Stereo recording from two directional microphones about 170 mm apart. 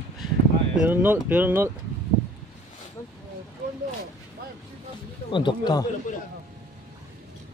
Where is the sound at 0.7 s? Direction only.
10° right (ahead or behind).